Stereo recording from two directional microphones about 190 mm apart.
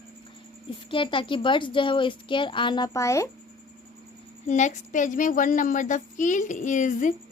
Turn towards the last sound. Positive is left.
turn(degrees=40)  # may be behind; listen again after turning